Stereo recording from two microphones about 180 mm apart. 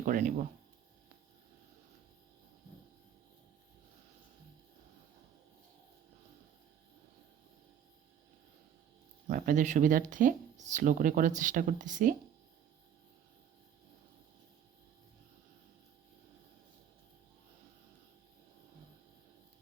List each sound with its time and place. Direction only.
0.0 s speech: 50° right (ahead or behind)
9.2 s speech: 45° right (ahead or behind)